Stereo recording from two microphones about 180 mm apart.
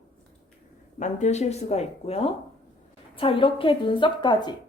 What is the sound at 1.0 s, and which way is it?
Speech, 40° left (ahead or behind).